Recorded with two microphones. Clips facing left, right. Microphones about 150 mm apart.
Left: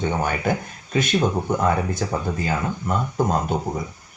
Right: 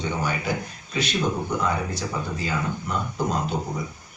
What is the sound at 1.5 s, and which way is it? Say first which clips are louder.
Speech: left 4 dB; 50° left (ahead or behind).